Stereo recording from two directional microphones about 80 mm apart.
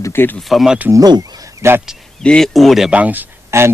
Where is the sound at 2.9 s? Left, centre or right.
Centre.